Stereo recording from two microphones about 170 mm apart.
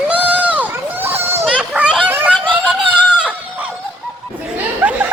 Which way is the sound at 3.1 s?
5° right (ahead or behind).